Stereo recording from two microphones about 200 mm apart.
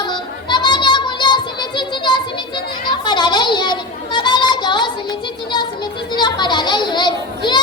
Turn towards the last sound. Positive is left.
turn(degrees=20)  # may be behind; listen again after turning